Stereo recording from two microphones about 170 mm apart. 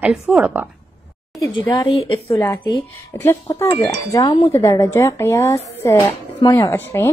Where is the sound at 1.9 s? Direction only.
30° left (ahead or behind).